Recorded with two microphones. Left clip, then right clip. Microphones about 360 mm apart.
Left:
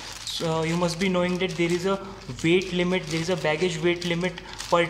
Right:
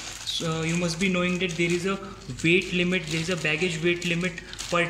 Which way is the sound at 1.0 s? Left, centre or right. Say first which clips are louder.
Right 1 dB; centre.